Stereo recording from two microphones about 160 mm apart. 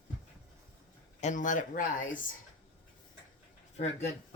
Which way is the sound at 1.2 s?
55° left (ahead or behind).